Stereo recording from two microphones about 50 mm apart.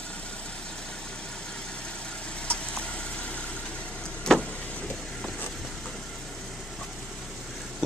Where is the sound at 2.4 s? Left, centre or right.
Left.